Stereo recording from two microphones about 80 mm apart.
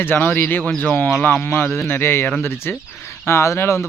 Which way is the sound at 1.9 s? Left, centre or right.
Left.